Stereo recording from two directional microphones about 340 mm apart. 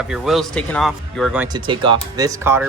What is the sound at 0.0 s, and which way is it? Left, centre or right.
Speech, centre.